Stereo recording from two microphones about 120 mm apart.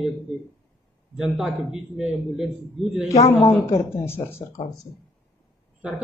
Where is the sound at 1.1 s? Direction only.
5° right (ahead or behind).